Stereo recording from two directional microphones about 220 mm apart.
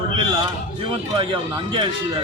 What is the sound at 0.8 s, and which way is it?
A man's voice, 20° right (ahead or behind).